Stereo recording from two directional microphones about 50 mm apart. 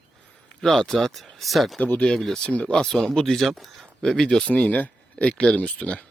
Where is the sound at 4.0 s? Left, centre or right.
Centre.